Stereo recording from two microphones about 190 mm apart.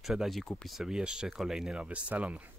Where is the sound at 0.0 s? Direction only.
Centre (ahead or behind).